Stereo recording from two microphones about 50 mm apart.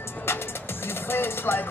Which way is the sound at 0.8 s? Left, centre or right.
Left.